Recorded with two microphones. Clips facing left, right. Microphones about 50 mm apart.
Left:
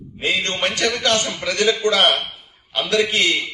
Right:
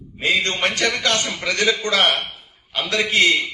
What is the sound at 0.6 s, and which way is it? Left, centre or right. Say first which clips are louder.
A man's voice: even; right.